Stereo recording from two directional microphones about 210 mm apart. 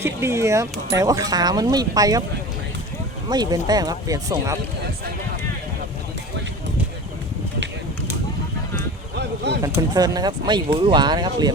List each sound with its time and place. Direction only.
0.0 s speech: 10° right (ahead or behind)
3.2 s speech: 20° right (ahead or behind)
9.1 s a sound: 55° right (ahead or behind)
9.6 s speech: 15° right (ahead or behind)